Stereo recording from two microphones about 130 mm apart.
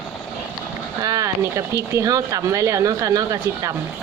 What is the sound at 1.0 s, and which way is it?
Speech, 25° right (ahead or behind).